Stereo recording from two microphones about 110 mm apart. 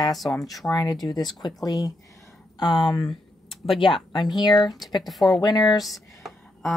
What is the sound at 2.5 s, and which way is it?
Speech, 45° left (ahead or behind).